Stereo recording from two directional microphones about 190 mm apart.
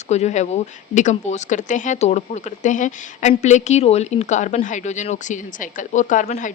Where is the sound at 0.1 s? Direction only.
35° left (ahead or behind).